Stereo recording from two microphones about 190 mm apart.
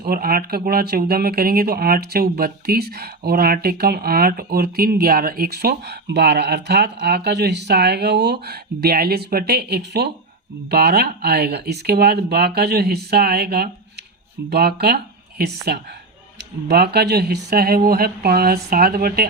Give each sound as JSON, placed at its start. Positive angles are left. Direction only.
{"t": 0.0, "sound": "speech", "side_deg": -50}